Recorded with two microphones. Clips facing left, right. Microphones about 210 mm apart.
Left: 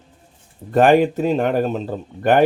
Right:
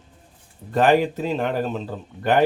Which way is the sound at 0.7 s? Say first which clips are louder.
Left 4 dB; 50° left (ahead or behind).